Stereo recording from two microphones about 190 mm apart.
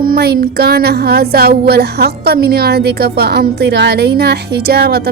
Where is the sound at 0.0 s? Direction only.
55° right (ahead or behind).